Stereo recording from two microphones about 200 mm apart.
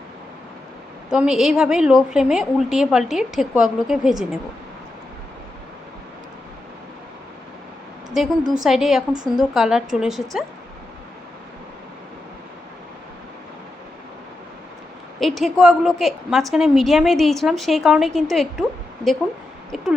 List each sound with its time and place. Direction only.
1.1 s a woman's voice: 5° right (ahead or behind)
8.1 s a woman's voice: centre (ahead or behind)
15.2 s a woman's voice: centre (ahead or behind)
19.7 s a woman's voice: 5° right (ahead or behind)